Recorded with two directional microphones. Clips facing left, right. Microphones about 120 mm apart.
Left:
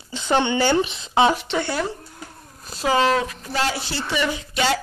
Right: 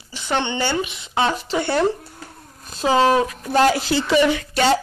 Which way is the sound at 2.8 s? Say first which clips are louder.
Right 3 dB; 25° right (ahead or behind).